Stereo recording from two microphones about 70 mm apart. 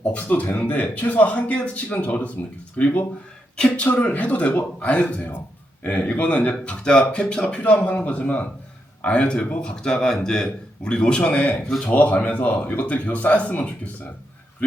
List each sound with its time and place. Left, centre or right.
0.0 s a man's voice: left